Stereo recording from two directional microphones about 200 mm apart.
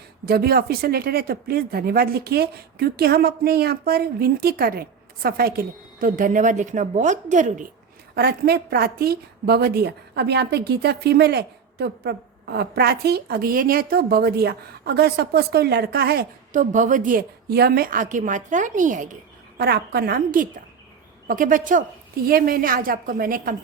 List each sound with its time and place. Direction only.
0.3 s a woman's voice: 50° right (ahead or behind)
8.1 s a woman's voice: 50° right (ahead or behind)
19.5 s a woman's voice: 50° right (ahead or behind)